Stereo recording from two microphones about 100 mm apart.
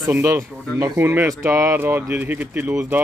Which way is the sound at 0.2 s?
30° right (ahead or behind).